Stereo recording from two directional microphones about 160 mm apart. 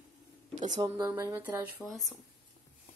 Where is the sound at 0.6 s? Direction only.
20° right (ahead or behind).